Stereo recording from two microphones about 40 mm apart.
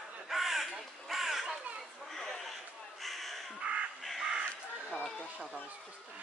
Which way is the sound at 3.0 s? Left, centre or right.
Centre.